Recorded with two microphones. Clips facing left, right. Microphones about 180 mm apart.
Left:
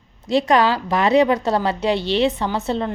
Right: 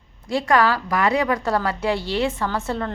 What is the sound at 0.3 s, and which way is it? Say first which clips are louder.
A woman's voice: left 3 dB; 20° left (ahead or behind).